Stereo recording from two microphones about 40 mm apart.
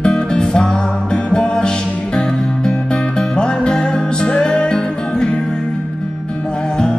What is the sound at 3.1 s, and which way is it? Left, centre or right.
Music, left.